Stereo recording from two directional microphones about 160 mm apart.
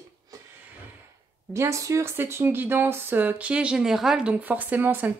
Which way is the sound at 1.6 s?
20° right (ahead or behind).